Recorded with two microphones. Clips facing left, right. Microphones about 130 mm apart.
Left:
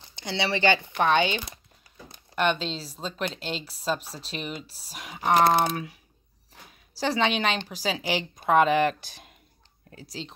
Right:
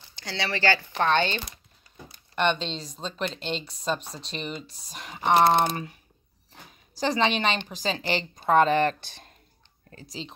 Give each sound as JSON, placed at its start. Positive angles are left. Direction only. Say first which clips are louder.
{"t": 0.1, "sound": "speech", "louder": "left 3 dB", "side_deg": 20}
{"t": 7.0, "sound": "speech", "louder": "right 1 dB", "side_deg": 0}